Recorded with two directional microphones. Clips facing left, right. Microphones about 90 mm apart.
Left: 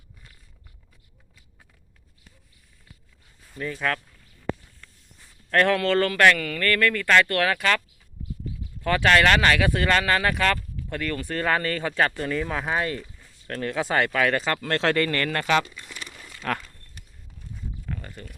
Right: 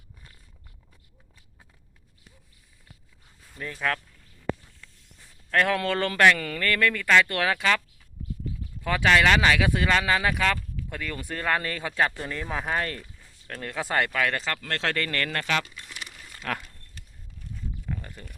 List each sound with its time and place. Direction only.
3.6 s speech: centre (ahead or behind)
5.5 s speech: 10° right (ahead or behind)
5.7 s speech: 20° right (ahead or behind)
8.8 s speech: 10° right (ahead or behind); by 14.5 s 10° left (ahead or behind)
14.5 s speech: 30° left (ahead or behind)
14.9 s speech: 5° left (ahead or behind)
17.8 s a sound: 10° right (ahead or behind)